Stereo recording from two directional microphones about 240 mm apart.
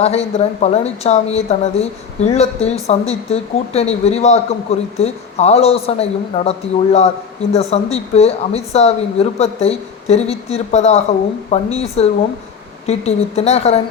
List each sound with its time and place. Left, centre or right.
0.0 s speech: left